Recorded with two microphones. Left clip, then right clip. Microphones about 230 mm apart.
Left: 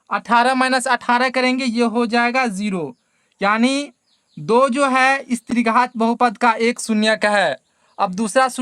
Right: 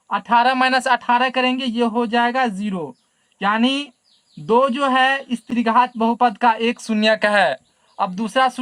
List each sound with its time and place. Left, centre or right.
0.3 s speech: left